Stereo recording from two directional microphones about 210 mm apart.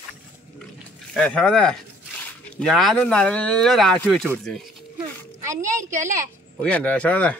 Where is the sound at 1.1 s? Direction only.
5° left (ahead or behind).